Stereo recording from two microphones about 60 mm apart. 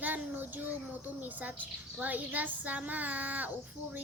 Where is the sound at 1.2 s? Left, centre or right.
Right.